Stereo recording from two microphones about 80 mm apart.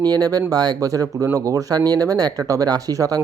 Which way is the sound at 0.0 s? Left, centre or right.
Right.